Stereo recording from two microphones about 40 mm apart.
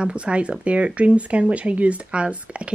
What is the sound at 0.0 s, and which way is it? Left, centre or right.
Speech, right.